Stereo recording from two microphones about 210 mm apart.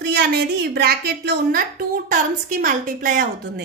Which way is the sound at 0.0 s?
50° right (ahead or behind).